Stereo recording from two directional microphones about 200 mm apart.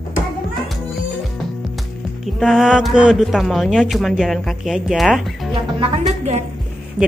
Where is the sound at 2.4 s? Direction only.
Centre (ahead or behind).